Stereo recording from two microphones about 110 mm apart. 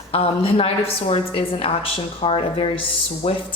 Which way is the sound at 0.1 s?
65° left (ahead or behind).